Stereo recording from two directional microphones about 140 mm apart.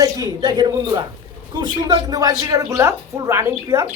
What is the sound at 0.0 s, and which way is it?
A man's voice, 25° right (ahead or behind).